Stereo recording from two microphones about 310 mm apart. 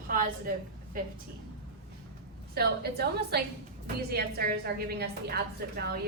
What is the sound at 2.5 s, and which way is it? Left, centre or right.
A woman's voice, right.